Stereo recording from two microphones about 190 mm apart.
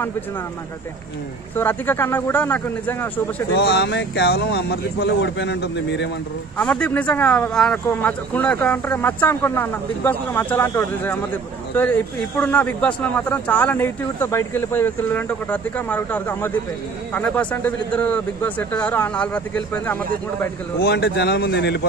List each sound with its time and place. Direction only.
1.6 s speech: 10° left (ahead or behind)
3.5 s speech: 60° left (ahead or behind)
6.6 s speech: 10° left (ahead or behind)
20.8 s speech: 60° left (ahead or behind)